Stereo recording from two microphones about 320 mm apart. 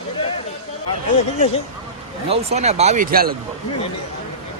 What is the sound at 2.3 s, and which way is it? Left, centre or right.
Speech, centre.